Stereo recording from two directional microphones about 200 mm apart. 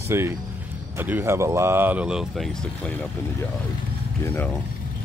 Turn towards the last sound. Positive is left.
turn(degrees=10)  # may be behind; listen again after turning